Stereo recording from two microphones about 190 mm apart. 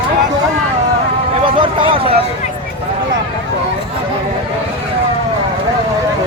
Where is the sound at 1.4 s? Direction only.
25° right (ahead or behind).